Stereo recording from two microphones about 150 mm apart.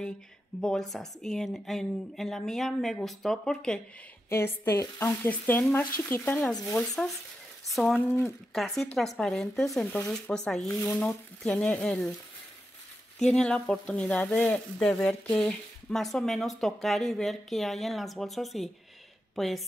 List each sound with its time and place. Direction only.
0.6 s speech: centre (ahead or behind)
4.3 s speech: 15° left (ahead or behind)
7.6 s speech: centre (ahead or behind)
8.0 s speech: 15° left (ahead or behind)
8.5 s speech: centre (ahead or behind)
13.2 s speech: 5° left (ahead or behind)